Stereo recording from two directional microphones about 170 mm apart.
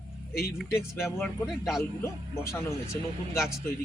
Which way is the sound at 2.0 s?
15° left (ahead or behind).